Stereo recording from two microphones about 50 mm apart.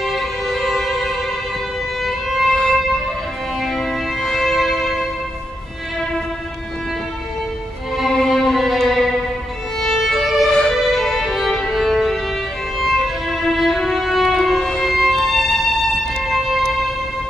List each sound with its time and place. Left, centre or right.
0.0 s music: centre
2.0 s violin: centre
2.5 s violin: left
3.6 s music: centre
4.5 s music: centre
8.1 s music: centre
9.8 s violin: centre
10.8 s music: centre
12.7 s violin: centre
14.6 s violin: centre
14.9 s music: centre